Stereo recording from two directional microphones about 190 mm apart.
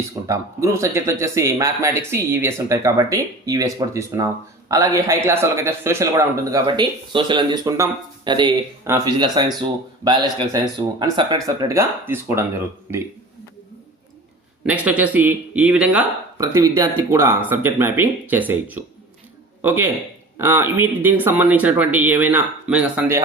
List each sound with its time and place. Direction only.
0.3 s speech: 15° right (ahead or behind)
14.7 s speech: 10° right (ahead or behind)
16.4 s speech: 15° right (ahead or behind)